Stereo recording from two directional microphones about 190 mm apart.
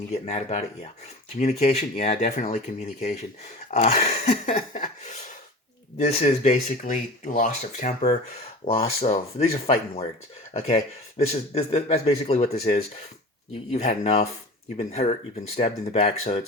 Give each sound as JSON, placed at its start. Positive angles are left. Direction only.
{"t": 0.3, "sound": "speech", "side_deg": 35}
{"t": 11.3, "sound": "speech", "side_deg": 35}